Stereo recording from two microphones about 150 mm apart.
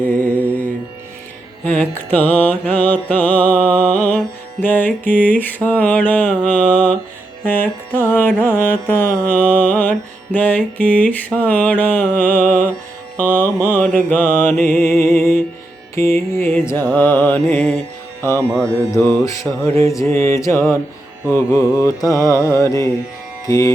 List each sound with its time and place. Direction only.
0.0 s mantra: 10° left (ahead or behind)
1.6 s music: 10° left (ahead or behind)
12.4 s music: 60° right (ahead or behind)
13.1 s music: 10° left (ahead or behind)
18.6 s mantra: 20° right (ahead or behind)
18.9 s mantra: 15° left (ahead or behind)